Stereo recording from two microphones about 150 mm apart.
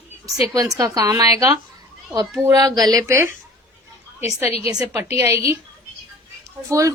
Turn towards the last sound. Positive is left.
turn(degrees=-20)  # may be behind; listen again after turning